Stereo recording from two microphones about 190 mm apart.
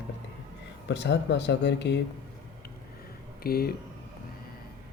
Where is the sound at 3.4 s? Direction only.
50° left (ahead or behind).